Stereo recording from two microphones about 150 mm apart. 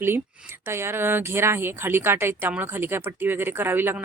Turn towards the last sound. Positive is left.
turn(degrees=-15)  # may be behind; listen again after turning